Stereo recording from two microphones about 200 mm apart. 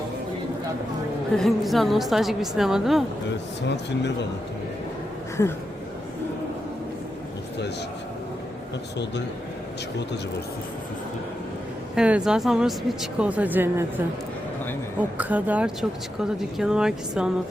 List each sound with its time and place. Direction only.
1.4 s speech: centre (ahead or behind)
3.7 s a man's voice: 60° left (ahead or behind)
11.9 s speech: 5° right (ahead or behind)
15.2 s speech: 10° right (ahead or behind)